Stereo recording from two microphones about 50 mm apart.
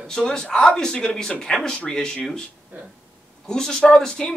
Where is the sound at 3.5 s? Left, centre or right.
Centre.